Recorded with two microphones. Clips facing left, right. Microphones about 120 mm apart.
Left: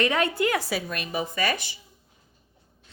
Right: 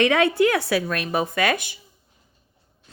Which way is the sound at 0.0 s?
90° right.